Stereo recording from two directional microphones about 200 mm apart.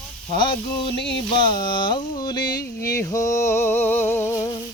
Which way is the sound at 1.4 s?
25° left (ahead or behind).